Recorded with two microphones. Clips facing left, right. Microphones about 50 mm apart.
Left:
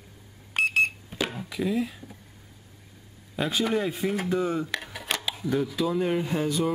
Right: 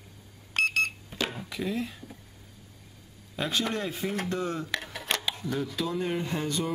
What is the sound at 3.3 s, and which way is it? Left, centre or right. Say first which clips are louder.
Speech: left 4 dB; centre.